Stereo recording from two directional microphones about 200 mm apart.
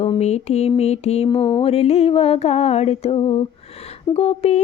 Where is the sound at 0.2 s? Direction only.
35° left (ahead or behind).